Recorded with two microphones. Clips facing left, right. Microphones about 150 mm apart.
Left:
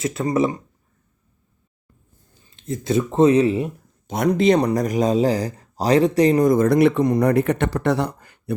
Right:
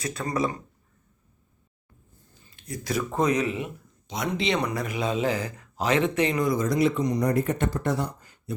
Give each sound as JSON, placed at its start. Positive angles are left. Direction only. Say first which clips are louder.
{"t": 0.0, "sound": "speech", "louder": "left 7 dB", "side_deg": 25}
{"t": 2.5, "sound": "speech", "louder": "left 8 dB", "side_deg": 25}
{"t": 4.0, "sound": "a man's voice", "louder": "left 10 dB", "side_deg": 50}